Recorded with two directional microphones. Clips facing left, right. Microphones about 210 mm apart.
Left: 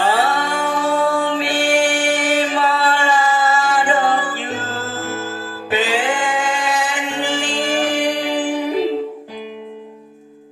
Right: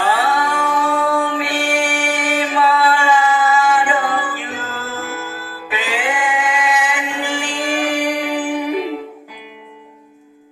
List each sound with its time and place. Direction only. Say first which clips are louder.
0.1 s music: even; 30° left (ahead or behind)